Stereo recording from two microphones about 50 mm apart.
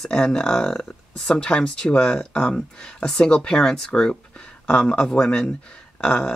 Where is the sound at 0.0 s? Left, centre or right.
Centre.